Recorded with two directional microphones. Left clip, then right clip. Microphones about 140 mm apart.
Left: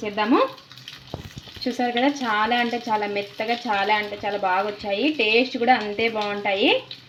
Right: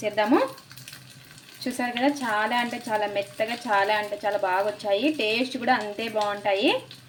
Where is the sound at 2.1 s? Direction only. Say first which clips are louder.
Left 3 dB; 25° left (ahead or behind).